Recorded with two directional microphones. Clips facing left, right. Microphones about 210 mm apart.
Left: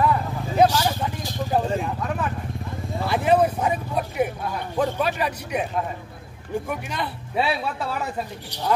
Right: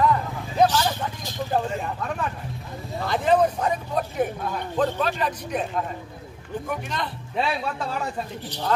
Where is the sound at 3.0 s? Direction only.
10° left (ahead or behind).